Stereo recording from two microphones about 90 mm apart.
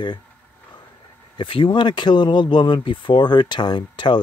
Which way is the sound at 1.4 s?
70° left (ahead or behind).